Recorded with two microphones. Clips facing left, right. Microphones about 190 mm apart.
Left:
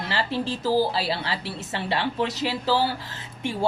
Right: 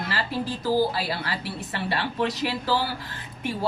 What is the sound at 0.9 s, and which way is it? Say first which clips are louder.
Speech: left 2 dB; 25° left (ahead or behind).